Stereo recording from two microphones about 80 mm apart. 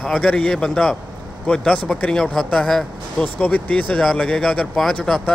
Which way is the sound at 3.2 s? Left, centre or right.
Centre.